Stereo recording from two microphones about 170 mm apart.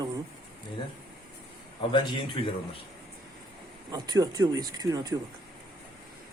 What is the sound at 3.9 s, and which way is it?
Speech, 20° right (ahead or behind).